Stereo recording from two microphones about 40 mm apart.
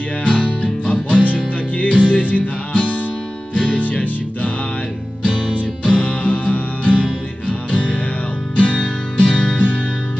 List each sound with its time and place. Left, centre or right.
0.2 s music: left
5.9 s music: left